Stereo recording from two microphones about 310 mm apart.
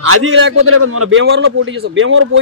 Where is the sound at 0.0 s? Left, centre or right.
Right.